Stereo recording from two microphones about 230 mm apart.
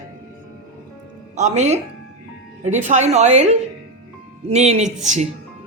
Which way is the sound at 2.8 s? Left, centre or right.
Right.